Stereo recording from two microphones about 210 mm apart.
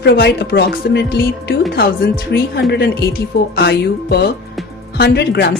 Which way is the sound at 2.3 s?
50° left (ahead or behind).